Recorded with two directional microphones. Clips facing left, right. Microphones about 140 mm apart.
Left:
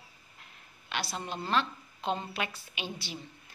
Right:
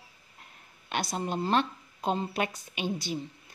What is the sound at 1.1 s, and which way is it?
A woman's voice, 40° right (ahead or behind).